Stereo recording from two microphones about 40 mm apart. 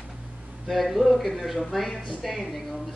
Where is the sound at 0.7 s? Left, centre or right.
Centre.